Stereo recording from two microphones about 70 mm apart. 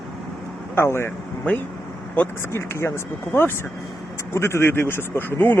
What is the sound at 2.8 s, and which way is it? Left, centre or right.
Speech, left.